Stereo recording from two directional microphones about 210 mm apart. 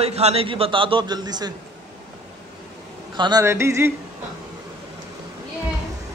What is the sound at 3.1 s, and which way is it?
Speech, 20° right (ahead or behind).